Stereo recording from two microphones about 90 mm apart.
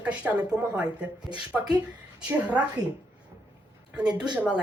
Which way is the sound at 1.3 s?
55° right (ahead or behind).